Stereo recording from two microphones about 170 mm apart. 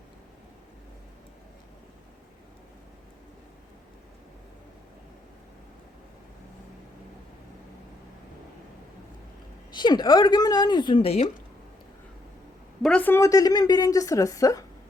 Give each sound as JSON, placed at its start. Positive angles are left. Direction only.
{"t": 9.7, "sound": "a woman's voice", "side_deg": 25}
{"t": 12.8, "sound": "a woman's voice", "side_deg": 5}